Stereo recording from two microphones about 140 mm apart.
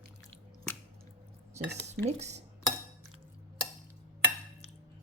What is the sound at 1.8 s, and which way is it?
Speech, 50° right (ahead or behind).